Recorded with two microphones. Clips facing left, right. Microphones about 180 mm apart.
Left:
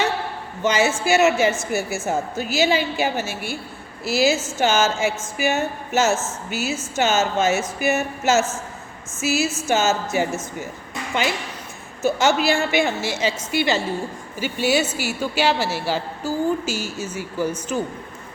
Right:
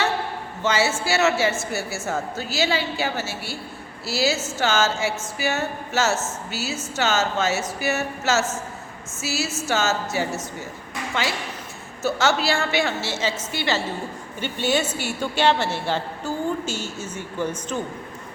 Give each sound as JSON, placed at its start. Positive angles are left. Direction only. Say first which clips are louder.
{"t": 0.6, "sound": "a woman's voice", "louder": "left 3 dB", "side_deg": 15}